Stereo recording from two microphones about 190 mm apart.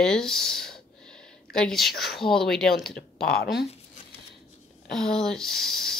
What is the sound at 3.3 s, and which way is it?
Speech, 55° left (ahead or behind).